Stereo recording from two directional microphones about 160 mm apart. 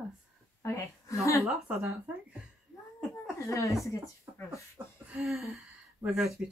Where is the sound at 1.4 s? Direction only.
Centre (ahead or behind).